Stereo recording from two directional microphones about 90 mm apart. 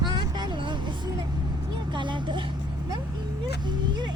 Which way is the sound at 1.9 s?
60° right (ahead or behind).